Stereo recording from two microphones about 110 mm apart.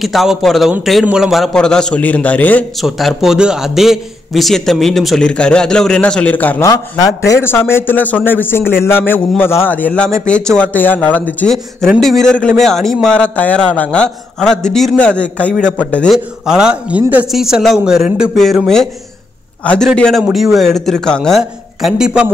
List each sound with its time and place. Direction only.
0.0 s a man's voice: centre (ahead or behind); by 2.6 s 15° left (ahead or behind)
2.8 s a man's voice: centre (ahead or behind); by 6.6 s 15° left (ahead or behind)
6.6 s a man's voice: 30° left (ahead or behind); by 11.5 s 15° left (ahead or behind)
12.0 s a man's voice: 5° left (ahead or behind)
16.1 s a man's voice: 5° right (ahead or behind)